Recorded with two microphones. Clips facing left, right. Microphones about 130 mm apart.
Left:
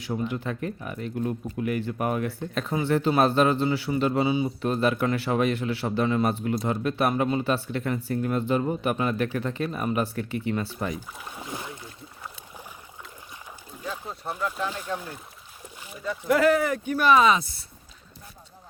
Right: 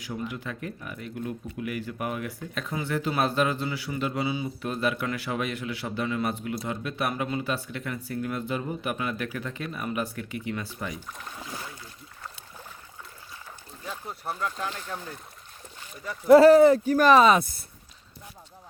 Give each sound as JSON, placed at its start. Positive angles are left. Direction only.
{"t": 0.0, "sound": "a man's voice", "side_deg": 30}
{"t": 11.2, "sound": "speech", "side_deg": 15}
{"t": 11.4, "sound": "boat", "side_deg": 25}
{"t": 13.9, "sound": "speech", "side_deg": 10}
{"t": 16.2, "sound": "speech", "side_deg": -30}